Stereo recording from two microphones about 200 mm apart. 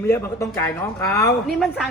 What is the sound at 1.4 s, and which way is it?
Speech, centre (ahead or behind).